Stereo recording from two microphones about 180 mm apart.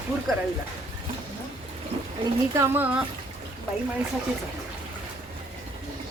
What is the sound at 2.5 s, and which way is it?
Speech, 15° right (ahead or behind).